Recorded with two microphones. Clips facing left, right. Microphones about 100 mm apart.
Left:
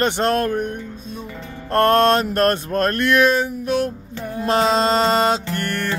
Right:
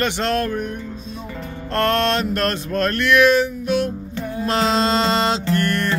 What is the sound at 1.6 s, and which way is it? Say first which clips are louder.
Mantra: left 4 dB; 40° left (ahead or behind).